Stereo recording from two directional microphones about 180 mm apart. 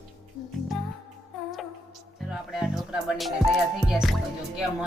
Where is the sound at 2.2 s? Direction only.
Centre (ahead or behind).